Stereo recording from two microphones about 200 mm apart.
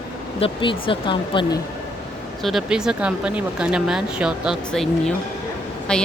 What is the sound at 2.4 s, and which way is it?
Speech, centre (ahead or behind).